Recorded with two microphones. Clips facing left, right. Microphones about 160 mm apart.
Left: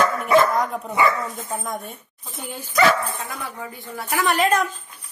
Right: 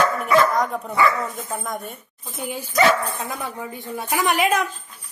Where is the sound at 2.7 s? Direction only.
20° right (ahead or behind).